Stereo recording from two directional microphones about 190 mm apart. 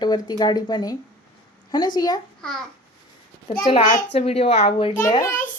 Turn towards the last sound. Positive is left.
turn(degrees=15)  # may be behind; listen again after turning